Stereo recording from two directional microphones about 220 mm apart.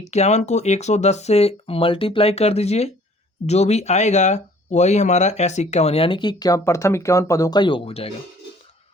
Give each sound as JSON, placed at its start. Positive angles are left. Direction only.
{"t": 0.0, "sound": "speech", "side_deg": 30}